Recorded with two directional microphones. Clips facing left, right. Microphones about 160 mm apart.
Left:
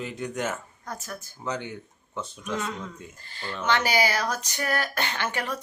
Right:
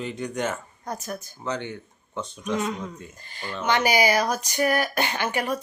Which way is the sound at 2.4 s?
15° right (ahead or behind).